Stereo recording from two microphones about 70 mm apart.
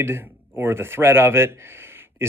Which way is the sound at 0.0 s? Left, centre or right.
Right.